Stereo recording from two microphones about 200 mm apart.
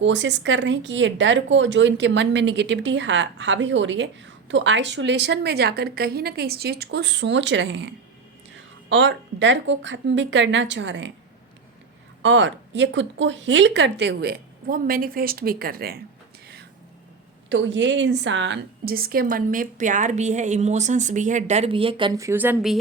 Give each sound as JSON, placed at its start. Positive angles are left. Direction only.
{"t": 0.0, "sound": "speech", "side_deg": -65}
{"t": 12.2, "sound": "speech", "side_deg": -65}
{"t": 17.5, "sound": "a woman's voice", "side_deg": -65}